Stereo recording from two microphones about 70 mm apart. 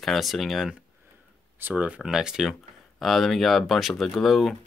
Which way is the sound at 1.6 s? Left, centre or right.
Centre.